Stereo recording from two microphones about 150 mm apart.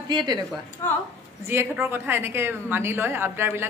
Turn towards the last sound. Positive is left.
turn(degrees=-15)  # may be behind; listen again after turning